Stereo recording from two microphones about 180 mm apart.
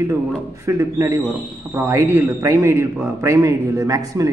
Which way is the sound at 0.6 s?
15° right (ahead or behind).